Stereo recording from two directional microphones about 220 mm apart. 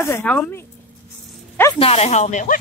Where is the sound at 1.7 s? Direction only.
25° left (ahead or behind).